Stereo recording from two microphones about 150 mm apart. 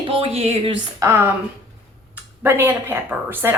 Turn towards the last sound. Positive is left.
turn(degrees=-15)  # may be behind; listen again after turning